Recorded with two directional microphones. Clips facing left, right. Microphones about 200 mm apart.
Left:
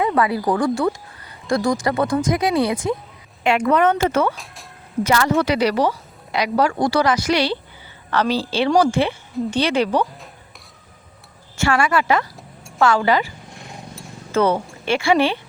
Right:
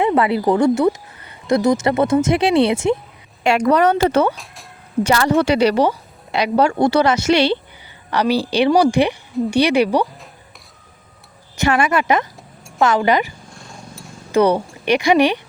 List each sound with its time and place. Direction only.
0.0 s speech: 25° right (ahead or behind)
3.4 s a woman's voice: 40° right (ahead or behind); by 7.6 s 25° right (ahead or behind)
8.1 s a woman's voice: 15° right (ahead or behind)
11.5 s a woman's voice: 20° right (ahead or behind)
13.5 s a sound: 20° left (ahead or behind)
14.3 s a woman's voice: 15° right (ahead or behind)